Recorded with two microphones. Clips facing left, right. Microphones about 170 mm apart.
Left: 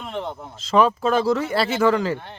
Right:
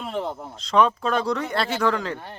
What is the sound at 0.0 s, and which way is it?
Speech, 5° right (ahead or behind).